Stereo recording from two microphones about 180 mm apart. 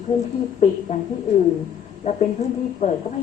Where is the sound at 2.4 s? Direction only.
40° left (ahead or behind).